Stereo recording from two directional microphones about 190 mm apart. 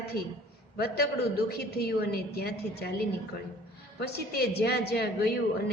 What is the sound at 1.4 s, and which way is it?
A woman's voice, 55° left (ahead or behind).